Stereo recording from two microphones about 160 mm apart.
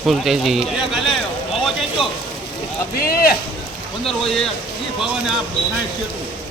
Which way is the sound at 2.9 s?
70° left (ahead or behind).